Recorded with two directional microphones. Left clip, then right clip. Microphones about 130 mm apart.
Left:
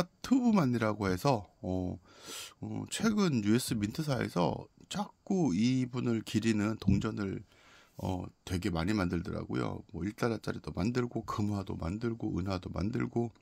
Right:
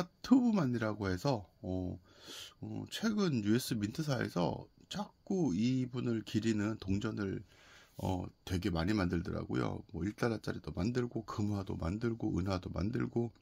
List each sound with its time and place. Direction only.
0.0 s speech: 55° left (ahead or behind); by 7.4 s 35° left (ahead or behind)
8.0 s speech: 25° left (ahead or behind)